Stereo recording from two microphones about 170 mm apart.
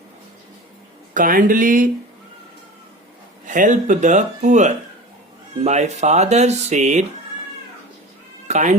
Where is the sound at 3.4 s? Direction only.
50° right (ahead or behind).